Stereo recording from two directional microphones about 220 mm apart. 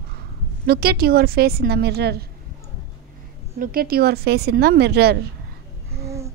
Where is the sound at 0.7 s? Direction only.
45° right (ahead or behind).